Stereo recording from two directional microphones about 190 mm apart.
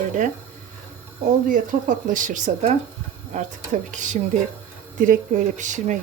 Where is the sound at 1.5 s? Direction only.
45° right (ahead or behind).